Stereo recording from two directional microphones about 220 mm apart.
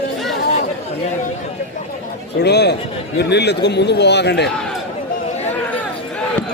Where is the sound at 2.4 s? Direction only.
50° left (ahead or behind).